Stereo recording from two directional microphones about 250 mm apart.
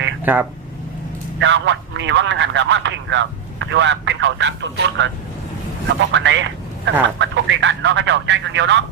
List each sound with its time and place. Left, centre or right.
0.3 s speech: centre
1.4 s speech: right